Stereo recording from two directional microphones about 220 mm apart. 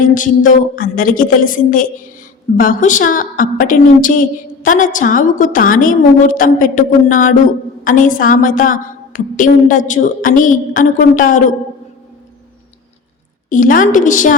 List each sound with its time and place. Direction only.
0.0 s a woman's voice: 35° left (ahead or behind)
13.5 s a woman's voice: 35° left (ahead or behind)